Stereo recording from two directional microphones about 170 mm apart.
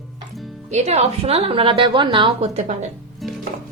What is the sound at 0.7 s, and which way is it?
A woman's voice, 40° right (ahead or behind).